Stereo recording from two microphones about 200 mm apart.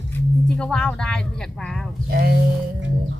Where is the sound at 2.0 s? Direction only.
50° right (ahead or behind).